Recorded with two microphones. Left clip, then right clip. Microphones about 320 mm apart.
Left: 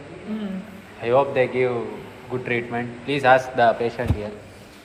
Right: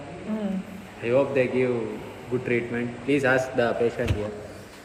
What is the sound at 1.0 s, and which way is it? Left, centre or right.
A man's voice, centre.